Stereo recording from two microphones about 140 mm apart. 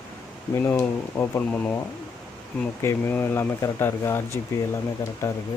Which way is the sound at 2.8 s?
15° left (ahead or behind).